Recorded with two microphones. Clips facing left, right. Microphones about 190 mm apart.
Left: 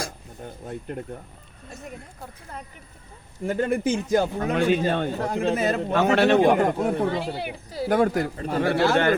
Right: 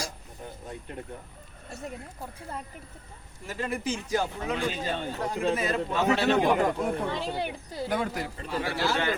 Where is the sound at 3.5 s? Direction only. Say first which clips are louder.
Left 8 dB; 50° left (ahead or behind).